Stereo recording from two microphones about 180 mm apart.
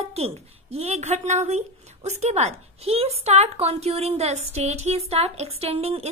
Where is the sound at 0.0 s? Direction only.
35° right (ahead or behind).